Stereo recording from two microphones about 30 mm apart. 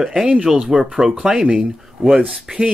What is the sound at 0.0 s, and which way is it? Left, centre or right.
Speech, centre.